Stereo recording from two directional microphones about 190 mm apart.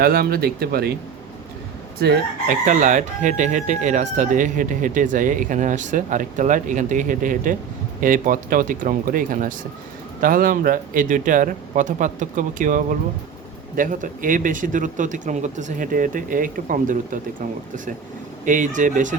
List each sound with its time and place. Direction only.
0.0 s speech: 55° right (ahead or behind)
2.0 s speech: 50° right (ahead or behind)
18.4 s speech: 40° right (ahead or behind)